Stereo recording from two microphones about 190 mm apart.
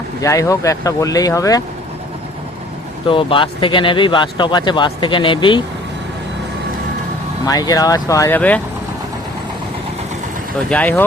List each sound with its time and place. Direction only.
0.2 s speech: 15° left (ahead or behind)
3.1 s speech: 30° left (ahead or behind)
7.4 s speech: 20° left (ahead or behind)
10.7 s speech: 10° left (ahead or behind)